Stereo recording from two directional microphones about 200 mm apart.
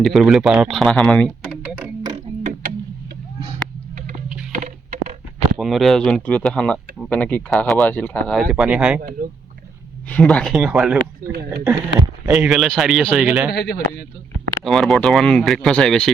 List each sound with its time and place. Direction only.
0.0 s speech: centre (ahead or behind)
2.4 s a sound: 40° right (ahead or behind)
4.5 s a sound: 35° right (ahead or behind)
5.5 s speech: centre (ahead or behind)
8.5 s speech: 5° right (ahead or behind)
9.2 s speech: 45° right (ahead or behind)
10.1 s speech: 5° left (ahead or behind)
11.3 s speech: 50° right (ahead or behind)
11.9 s speech: 5° right (ahead or behind)
13.5 s speech: 50° left (ahead or behind)
14.6 s speech: centre (ahead or behind)